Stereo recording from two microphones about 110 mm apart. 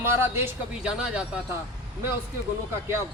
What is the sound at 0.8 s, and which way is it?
Speech, 5° right (ahead or behind).